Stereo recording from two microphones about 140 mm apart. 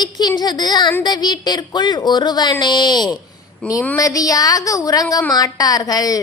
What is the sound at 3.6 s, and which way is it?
Speech, 10° left (ahead or behind).